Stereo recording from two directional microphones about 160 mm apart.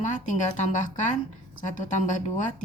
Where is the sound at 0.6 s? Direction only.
50° left (ahead or behind).